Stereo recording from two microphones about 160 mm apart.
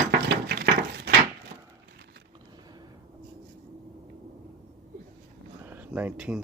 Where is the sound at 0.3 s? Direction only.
90° right.